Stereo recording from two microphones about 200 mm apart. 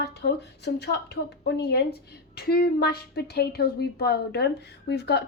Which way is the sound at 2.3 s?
50° left (ahead or behind).